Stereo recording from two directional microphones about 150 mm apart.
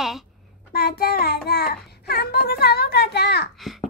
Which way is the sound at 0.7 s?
90° left.